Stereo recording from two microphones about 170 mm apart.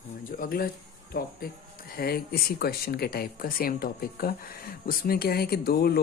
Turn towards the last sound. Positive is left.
turn(degrees=65)  # may be behind; listen again after turning